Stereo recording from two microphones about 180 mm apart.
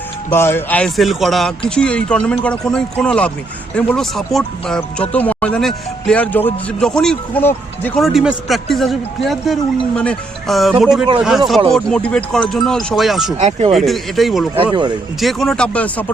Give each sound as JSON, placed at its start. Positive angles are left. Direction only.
{"t": 0.3, "sound": "speech", "side_deg": 10}
{"t": 8.0, "sound": "speech", "side_deg": -5}
{"t": 13.4, "sound": "speech", "side_deg": -35}
{"t": 13.7, "sound": "speech", "side_deg": 0}
{"t": 14.5, "sound": "speech", "side_deg": -25}
{"t": 15.2, "sound": "speech", "side_deg": 0}